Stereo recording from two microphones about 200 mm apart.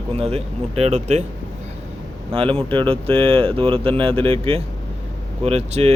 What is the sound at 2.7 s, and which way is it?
A man's voice, 25° right (ahead or behind).